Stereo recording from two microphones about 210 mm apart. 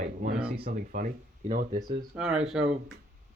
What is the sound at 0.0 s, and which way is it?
Speech, 40° right (ahead or behind).